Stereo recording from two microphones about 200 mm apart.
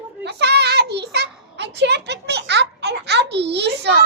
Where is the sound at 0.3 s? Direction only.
55° right (ahead or behind).